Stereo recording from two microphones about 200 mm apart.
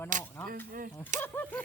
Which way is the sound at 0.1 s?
40° right (ahead or behind).